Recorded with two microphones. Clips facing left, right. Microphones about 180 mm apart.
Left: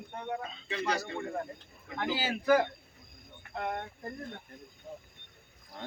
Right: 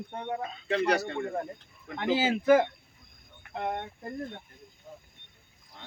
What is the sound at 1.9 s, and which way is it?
Speech, 25° right (ahead or behind).